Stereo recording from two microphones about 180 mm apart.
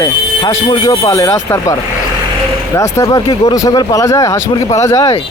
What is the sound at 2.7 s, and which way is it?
Speech, 20° left (ahead or behind).